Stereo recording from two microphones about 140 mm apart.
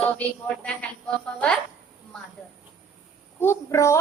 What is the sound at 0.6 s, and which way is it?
Speech, 5° left (ahead or behind).